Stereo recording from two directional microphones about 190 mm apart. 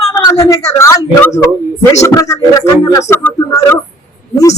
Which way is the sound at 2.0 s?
15° left (ahead or behind).